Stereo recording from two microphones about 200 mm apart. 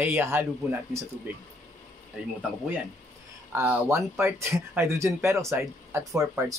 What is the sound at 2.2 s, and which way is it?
Speech, 5° right (ahead or behind).